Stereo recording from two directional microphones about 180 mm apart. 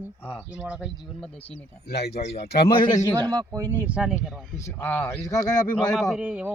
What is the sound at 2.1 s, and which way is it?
Speech, 35° left (ahead or behind).